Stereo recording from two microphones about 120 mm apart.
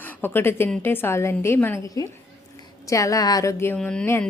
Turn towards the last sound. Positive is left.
turn(degrees=5)  # may be behind; listen again after turning